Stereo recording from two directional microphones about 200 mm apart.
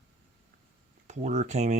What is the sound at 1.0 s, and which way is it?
Speech, 35° right (ahead or behind).